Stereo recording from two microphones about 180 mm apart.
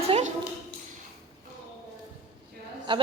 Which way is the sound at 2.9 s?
25° right (ahead or behind).